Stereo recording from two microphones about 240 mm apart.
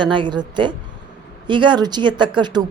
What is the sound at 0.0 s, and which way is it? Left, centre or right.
Speech, centre.